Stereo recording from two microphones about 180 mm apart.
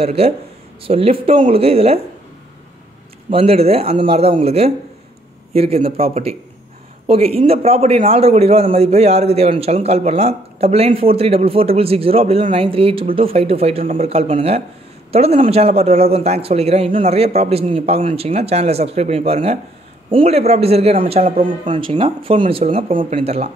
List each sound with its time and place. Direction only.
0.0 s a man's voice: 35° right (ahead or behind)
3.3 s a man's voice: 30° right (ahead or behind)